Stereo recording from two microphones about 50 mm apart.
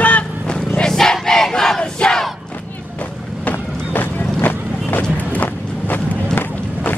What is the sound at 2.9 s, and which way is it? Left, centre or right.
Vehicle, left.